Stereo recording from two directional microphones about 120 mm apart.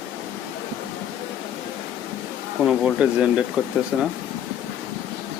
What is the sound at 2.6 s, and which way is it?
Speech, 5° right (ahead or behind).